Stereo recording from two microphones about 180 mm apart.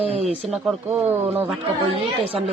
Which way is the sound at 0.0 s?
35° right (ahead or behind).